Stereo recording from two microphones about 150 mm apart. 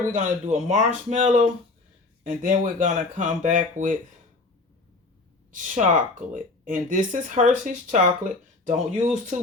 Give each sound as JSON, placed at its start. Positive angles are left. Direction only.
{"t": 0.1, "sound": "speech", "side_deg": -50}
{"t": 5.5, "sound": "speech", "side_deg": -55}